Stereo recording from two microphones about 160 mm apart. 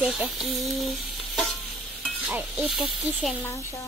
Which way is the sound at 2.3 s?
10° right (ahead or behind).